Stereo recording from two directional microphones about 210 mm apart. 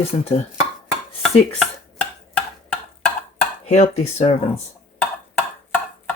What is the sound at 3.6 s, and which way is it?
Speech, 30° left (ahead or behind).